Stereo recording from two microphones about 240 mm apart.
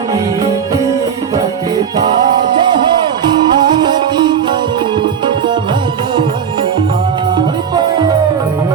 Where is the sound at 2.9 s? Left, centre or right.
Centre.